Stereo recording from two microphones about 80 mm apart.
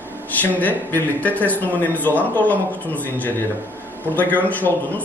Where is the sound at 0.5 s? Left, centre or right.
Left.